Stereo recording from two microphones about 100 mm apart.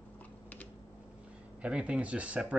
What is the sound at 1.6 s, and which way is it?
Speech, 10° right (ahead or behind).